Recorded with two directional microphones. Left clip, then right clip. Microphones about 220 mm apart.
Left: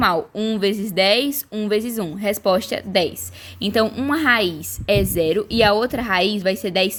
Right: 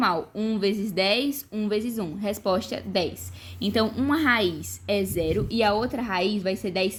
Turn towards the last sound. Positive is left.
turn(degrees=40)  # may be behind; listen again after turning